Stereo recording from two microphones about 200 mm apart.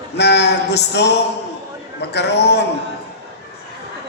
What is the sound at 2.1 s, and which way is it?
Speech, 55° left (ahead or behind).